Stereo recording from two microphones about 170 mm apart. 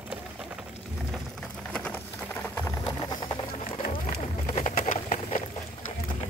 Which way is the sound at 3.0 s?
25° left (ahead or behind).